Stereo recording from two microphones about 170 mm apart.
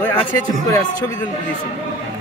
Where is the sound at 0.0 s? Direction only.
10° left (ahead or behind).